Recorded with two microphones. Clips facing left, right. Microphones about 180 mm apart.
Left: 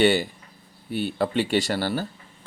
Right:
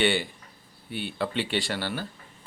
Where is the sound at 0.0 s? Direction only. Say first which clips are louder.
Left 5 dB; 40° left (ahead or behind).